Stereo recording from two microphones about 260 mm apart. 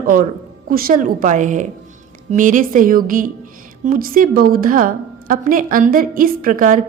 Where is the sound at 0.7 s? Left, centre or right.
Right.